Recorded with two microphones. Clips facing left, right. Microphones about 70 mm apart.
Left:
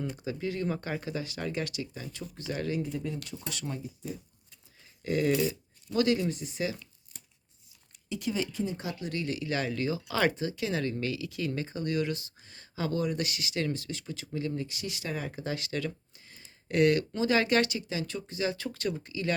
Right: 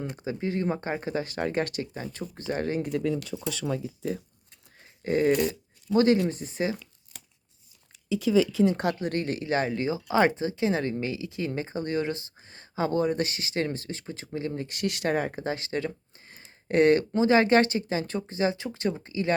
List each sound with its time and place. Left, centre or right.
0.1 s speech: right
2.8 s speech: right
4.8 s a sound: right
5.3 s speech: right
5.9 s speech: right
7.1 s tearing: right
8.6 s speech: right
9.0 s speech: right
14.7 s speech: right